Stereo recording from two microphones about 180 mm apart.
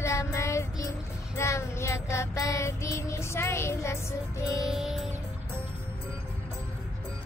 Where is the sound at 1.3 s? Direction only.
15° left (ahead or behind).